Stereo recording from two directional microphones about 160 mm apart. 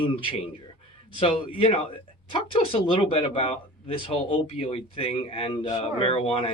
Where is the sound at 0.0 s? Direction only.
35° left (ahead or behind).